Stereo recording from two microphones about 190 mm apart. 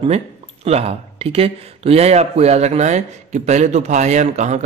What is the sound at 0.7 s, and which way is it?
Speech, 35° right (ahead or behind).